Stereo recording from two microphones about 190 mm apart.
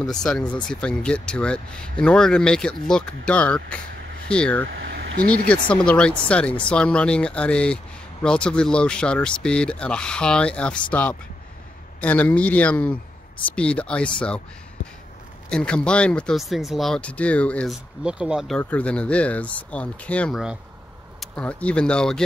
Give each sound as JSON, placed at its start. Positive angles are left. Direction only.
{"t": 0.0, "sound": "speech", "side_deg": 5}
{"t": 4.7, "sound": "a sound", "side_deg": -70}
{"t": 5.8, "sound": "speech", "side_deg": 5}
{"t": 15.5, "sound": "speech", "side_deg": 5}
{"t": 18.0, "sound": "speech", "side_deg": -5}
{"t": 18.6, "sound": "speech", "side_deg": 10}